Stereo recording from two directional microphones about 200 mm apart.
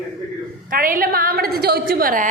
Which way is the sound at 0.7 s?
45° right (ahead or behind).